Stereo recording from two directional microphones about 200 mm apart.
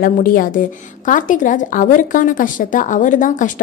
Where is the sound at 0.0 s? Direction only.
45° left (ahead or behind).